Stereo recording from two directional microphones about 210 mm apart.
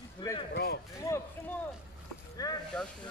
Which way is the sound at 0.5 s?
50° left (ahead or behind).